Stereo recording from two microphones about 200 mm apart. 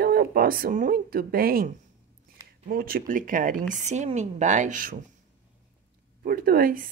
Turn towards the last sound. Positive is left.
turn(degrees=-45)  # may be behind; listen again after turning